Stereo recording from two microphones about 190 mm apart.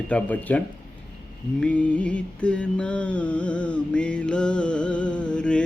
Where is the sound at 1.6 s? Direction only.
5° left (ahead or behind).